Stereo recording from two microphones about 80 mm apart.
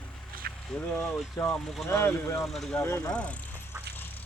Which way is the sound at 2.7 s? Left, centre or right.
Left.